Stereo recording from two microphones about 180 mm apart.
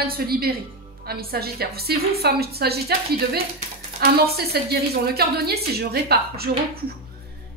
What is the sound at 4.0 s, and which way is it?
A woman's voice, 60° right (ahead or behind).